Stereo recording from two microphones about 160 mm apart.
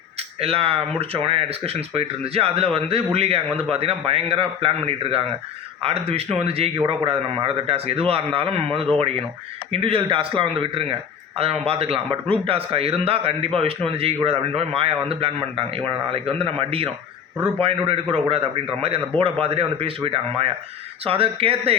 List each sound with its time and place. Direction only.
0.3 s a man's voice: 40° right (ahead or behind)